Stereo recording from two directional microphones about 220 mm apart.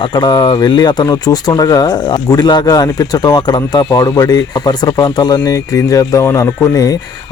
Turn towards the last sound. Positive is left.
turn(degrees=15)  # may be behind; listen again after turning